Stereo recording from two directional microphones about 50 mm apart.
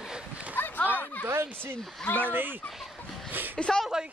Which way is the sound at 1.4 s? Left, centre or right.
Right.